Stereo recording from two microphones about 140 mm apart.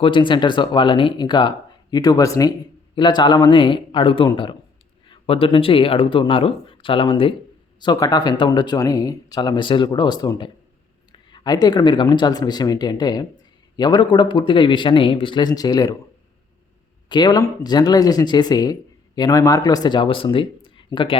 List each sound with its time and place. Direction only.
0.0 s speech: 35° left (ahead or behind)
17.1 s speech: 30° left (ahead or behind)
20.7 s a sound: 35° left (ahead or behind)